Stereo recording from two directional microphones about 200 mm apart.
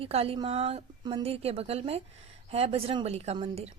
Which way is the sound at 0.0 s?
30° right (ahead or behind).